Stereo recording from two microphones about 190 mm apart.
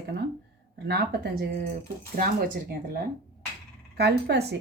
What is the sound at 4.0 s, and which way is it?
Speech, 60° right (ahead or behind).